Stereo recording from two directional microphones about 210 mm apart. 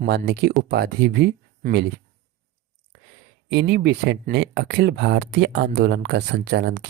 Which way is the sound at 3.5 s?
55° right (ahead or behind).